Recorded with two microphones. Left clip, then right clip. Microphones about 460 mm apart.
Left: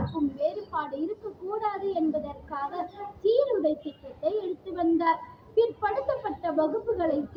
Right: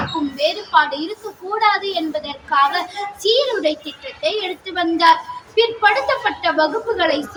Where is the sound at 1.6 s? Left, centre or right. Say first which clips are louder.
Right 14 dB; left.